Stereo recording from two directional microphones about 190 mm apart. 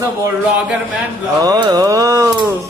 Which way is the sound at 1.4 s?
20° right (ahead or behind).